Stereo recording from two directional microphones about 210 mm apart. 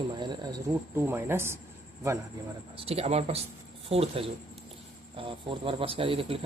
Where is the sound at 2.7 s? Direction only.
25° right (ahead or behind).